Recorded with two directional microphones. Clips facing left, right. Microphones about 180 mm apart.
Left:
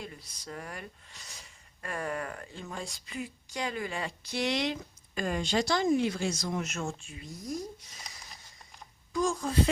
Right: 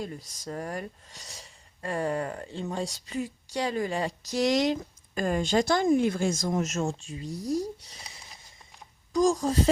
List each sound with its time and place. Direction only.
0.0 s speech: 40° right (ahead or behind)